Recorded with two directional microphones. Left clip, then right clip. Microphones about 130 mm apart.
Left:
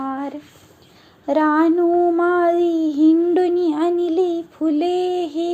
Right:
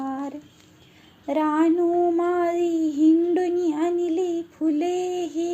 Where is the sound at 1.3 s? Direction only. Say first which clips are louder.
Left 5 dB; 25° left (ahead or behind).